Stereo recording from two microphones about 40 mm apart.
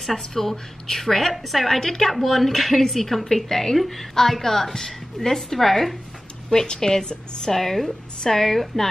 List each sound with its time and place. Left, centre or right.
0.0 s a woman's voice: centre
6.5 s a woman's voice: centre
7.5 s a woman's voice: centre